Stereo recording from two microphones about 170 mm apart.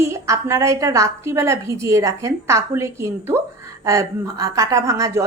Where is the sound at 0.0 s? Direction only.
15° right (ahead or behind).